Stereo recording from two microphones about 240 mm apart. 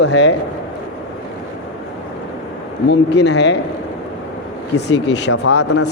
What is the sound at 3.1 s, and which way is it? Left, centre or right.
Speech, left.